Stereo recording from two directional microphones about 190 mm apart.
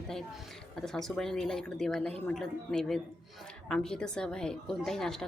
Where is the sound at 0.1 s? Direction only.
Centre (ahead or behind).